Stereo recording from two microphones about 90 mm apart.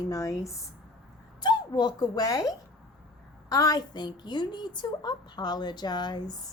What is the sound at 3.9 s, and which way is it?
A woman's voice, 55° left (ahead or behind).